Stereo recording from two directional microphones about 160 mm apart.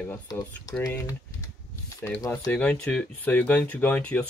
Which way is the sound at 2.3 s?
5° left (ahead or behind).